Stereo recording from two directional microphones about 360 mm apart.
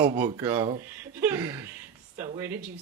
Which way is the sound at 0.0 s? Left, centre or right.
Centre.